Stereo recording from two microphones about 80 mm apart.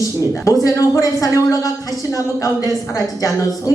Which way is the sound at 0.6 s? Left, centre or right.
Left.